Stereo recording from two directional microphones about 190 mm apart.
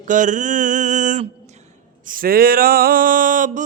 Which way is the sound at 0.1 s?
40° right (ahead or behind).